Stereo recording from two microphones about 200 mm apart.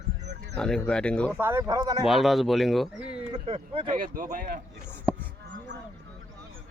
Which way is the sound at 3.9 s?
45° right (ahead or behind).